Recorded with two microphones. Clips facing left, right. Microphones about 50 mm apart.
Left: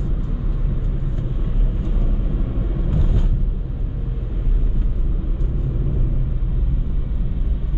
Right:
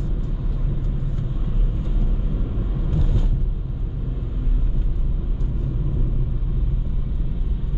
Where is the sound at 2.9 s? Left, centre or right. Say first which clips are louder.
Left 1 dB; centre.